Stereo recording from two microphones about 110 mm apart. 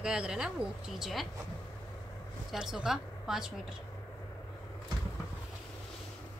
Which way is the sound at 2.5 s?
5° right (ahead or behind).